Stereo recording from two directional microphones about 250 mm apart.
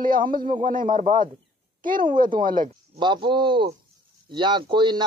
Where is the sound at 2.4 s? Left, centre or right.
Right.